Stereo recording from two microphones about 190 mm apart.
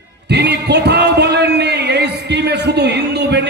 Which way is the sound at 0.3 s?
60° right (ahead or behind).